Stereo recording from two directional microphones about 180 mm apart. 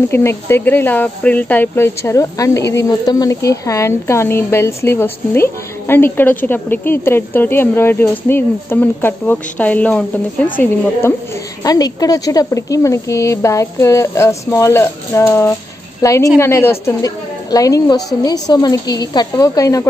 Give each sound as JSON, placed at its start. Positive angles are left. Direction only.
{"t": 0.1, "sound": "a woman's voice", "side_deg": 15}